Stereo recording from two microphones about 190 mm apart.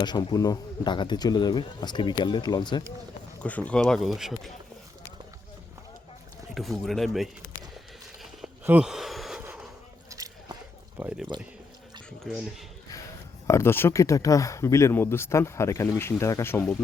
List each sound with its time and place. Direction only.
0.0 s speech: 20° left (ahead or behind)
3.4 s speech: 5° left (ahead or behind)
6.5 s speech: centre (ahead or behind)
8.2 s a sound: 5° right (ahead or behind)
10.1 s biting: 20° right (ahead or behind)
11.3 s speech: 25° right (ahead or behind)
13.5 s speech: 15° left (ahead or behind)